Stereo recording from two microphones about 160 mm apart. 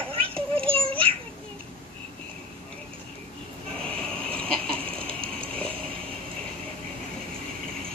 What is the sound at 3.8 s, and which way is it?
Chicken, 10° left (ahead or behind).